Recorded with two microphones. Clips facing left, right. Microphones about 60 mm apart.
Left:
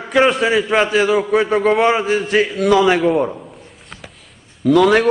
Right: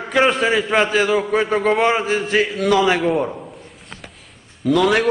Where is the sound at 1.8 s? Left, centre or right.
Centre.